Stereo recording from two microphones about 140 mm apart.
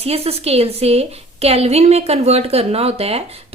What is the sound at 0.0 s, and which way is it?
A woman's voice, 45° right (ahead or behind).